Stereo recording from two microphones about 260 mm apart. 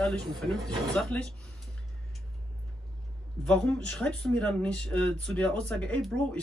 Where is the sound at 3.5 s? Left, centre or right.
Centre.